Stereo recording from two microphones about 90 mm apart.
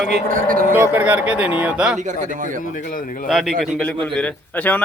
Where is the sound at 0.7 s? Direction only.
20° right (ahead or behind).